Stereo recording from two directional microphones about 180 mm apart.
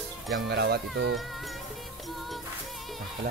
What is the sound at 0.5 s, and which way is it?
Speech, 65° right (ahead or behind).